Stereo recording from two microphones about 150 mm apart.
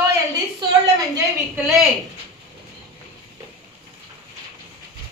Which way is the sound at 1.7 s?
Centre (ahead or behind).